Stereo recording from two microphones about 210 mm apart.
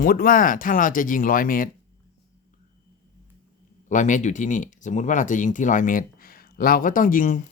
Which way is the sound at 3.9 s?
35° left (ahead or behind).